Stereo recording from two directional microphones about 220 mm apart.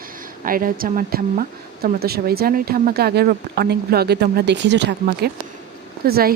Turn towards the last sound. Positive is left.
turn(degrees=-45)  # may be behind; listen again after turning